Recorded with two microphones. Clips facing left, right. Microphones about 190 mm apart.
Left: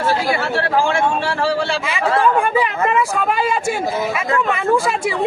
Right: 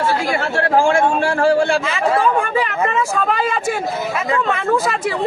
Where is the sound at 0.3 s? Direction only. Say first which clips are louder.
Right 1 dB; 50° right (ahead or behind).